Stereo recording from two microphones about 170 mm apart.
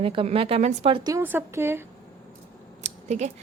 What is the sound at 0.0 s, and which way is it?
A woman's voice, 30° right (ahead or behind).